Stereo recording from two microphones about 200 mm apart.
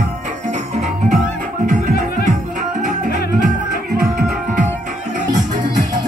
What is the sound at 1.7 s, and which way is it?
Music, 40° right (ahead or behind).